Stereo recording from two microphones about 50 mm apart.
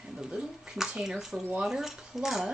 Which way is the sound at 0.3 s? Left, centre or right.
Centre.